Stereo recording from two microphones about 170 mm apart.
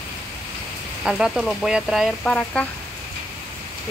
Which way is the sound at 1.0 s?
5° right (ahead or behind).